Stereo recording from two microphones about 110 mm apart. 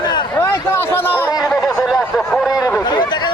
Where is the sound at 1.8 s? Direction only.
5° left (ahead or behind).